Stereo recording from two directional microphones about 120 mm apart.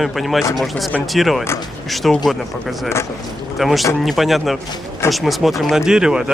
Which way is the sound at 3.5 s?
Centre (ahead or behind).